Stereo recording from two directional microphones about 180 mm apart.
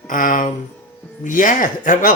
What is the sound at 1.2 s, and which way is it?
Speech, 45° left (ahead or behind).